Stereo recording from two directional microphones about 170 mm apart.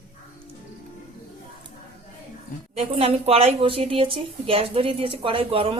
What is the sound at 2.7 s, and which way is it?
A woman's voice, 35° right (ahead or behind).